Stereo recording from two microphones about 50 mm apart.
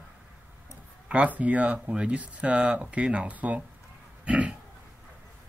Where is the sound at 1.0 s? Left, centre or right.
Right.